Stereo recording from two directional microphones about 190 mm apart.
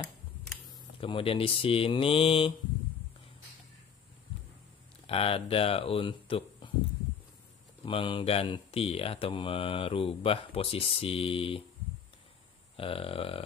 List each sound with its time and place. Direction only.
0.0 s a sound: 5° left (ahead or behind)
1.0 s speech: 30° left (ahead or behind)
5.0 s speech: 30° left (ahead or behind)
7.8 s speech: 25° left (ahead or behind)
12.7 s speech: 30° left (ahead or behind)